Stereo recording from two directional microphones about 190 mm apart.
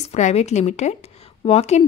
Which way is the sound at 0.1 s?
35° left (ahead or behind).